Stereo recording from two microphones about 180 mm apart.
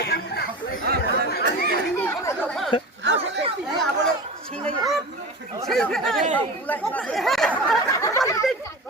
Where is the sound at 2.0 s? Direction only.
10° left (ahead or behind).